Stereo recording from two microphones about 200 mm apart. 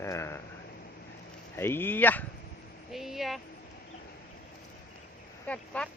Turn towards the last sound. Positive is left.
turn(degrees=5)  # may be behind; listen again after turning